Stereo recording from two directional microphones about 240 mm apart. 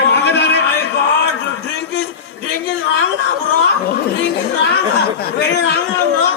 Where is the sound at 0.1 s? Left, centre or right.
Left.